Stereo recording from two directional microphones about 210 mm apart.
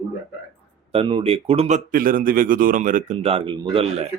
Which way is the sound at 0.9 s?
25° right (ahead or behind).